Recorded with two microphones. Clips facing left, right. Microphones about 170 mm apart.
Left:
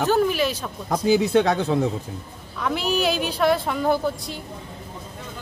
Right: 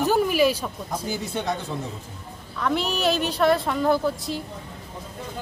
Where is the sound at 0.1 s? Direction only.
10° right (ahead or behind).